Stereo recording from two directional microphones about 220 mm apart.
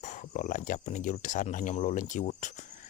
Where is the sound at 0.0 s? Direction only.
35° left (ahead or behind).